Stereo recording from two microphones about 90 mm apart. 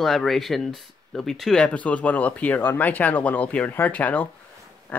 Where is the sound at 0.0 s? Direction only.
Centre (ahead or behind).